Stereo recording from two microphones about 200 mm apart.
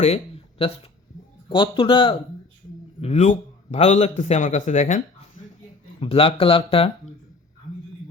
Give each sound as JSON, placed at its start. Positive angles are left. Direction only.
{"t": 1.5, "sound": "speech", "side_deg": 25}
{"t": 3.0, "sound": "a man's voice", "side_deg": 35}
{"t": 6.0, "sound": "speech", "side_deg": 25}